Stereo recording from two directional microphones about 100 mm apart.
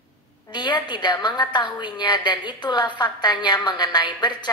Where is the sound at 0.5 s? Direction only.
50° left (ahead or behind).